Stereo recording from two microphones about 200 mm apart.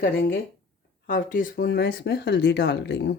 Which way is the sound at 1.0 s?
45° left (ahead or behind).